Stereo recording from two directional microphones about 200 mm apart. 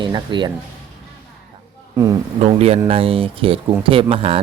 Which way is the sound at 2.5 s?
30° right (ahead or behind).